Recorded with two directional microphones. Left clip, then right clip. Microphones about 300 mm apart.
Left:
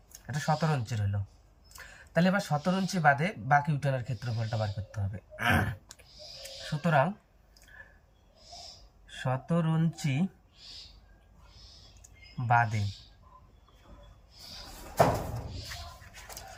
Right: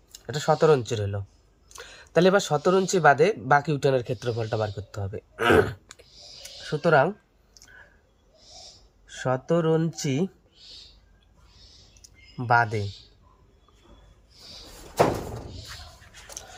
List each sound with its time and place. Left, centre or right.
0.3 s speech: centre
9.1 s speech: centre
12.0 s a sound: centre